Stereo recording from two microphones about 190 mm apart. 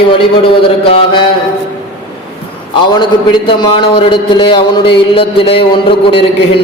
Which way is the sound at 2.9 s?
25° left (ahead or behind).